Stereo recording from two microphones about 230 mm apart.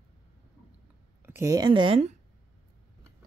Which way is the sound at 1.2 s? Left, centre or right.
Centre.